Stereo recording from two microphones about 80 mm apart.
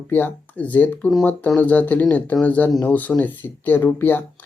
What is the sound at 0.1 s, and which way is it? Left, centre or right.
Speech, left.